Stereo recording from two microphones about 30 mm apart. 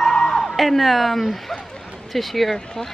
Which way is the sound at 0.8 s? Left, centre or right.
Centre.